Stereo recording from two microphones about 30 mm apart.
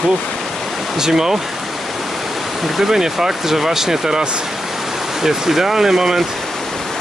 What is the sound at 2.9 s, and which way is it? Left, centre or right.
Speech, centre.